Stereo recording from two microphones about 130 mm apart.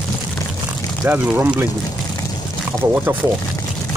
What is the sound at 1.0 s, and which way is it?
Speech, 15° right (ahead or behind).